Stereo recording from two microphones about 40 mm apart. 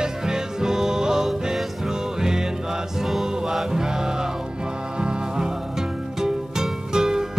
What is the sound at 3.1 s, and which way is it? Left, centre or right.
Music, centre.